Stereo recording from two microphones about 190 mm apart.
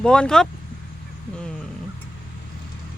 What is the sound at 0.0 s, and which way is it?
Speech, 5° left (ahead or behind).